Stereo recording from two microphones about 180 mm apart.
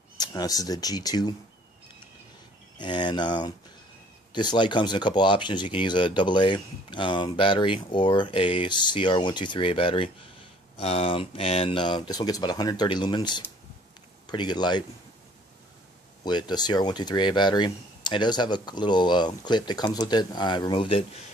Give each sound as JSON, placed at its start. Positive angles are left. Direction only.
{"t": 0.2, "sound": "speech", "side_deg": 20}
{"t": 2.8, "sound": "speech", "side_deg": 25}
{"t": 16.3, "sound": "speech", "side_deg": 25}